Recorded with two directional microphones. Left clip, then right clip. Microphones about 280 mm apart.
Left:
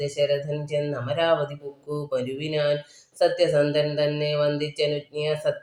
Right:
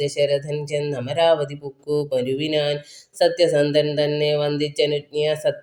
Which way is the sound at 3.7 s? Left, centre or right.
Right.